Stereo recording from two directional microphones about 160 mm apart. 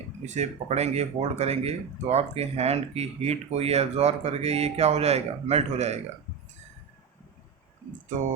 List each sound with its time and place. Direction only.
0.3 s speech: 45° right (ahead or behind)